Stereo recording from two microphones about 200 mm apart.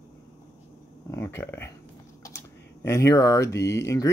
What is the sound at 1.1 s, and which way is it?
Speech, 10° left (ahead or behind).